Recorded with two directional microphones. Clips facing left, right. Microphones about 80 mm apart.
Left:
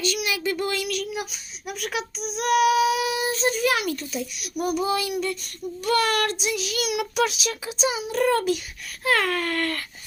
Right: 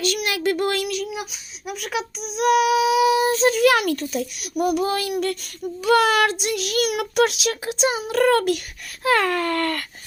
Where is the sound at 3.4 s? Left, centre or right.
Right.